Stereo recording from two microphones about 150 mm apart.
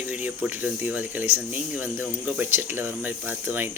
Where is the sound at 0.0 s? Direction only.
10° right (ahead or behind).